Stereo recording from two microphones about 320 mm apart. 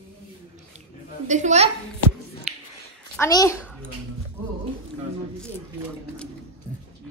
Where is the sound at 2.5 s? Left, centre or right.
Centre.